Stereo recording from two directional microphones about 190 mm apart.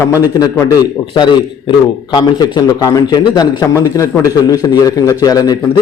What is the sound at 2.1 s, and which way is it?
A man's voice, 20° left (ahead or behind).